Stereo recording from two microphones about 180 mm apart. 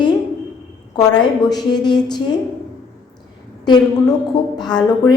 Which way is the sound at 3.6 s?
25° left (ahead or behind).